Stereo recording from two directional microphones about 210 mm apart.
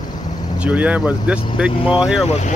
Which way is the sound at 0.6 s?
5° right (ahead or behind).